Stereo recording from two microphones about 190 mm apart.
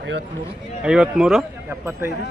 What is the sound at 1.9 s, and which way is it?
Speech, 15° right (ahead or behind).